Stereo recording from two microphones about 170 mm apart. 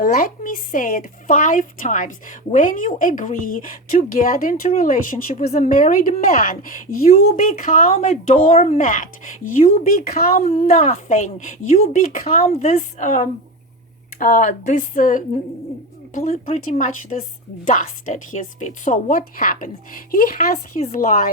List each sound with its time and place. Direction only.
0.0 s a woman's voice: 55° left (ahead or behind)
10.6 s a woman's voice: 45° left (ahead or behind)